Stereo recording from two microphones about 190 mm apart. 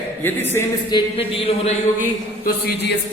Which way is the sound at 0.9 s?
25° left (ahead or behind).